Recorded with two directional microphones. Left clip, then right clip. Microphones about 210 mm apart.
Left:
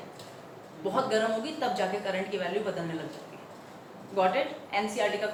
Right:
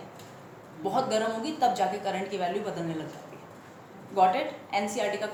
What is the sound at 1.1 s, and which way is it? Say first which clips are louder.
A woman's voice: even; 50° right (ahead or behind).